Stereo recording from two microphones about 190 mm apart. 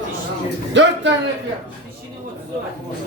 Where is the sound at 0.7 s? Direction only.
75° right (ahead or behind).